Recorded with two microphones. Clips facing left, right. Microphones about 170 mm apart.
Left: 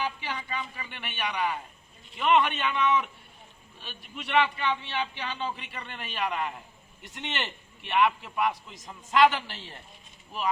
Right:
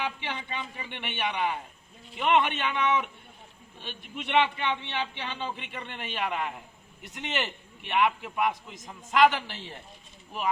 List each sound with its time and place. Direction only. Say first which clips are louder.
0.0 s a man's voice: even; 20° right (ahead or behind)